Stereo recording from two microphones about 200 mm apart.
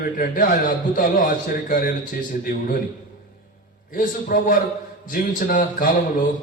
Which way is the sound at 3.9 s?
45° left (ahead or behind).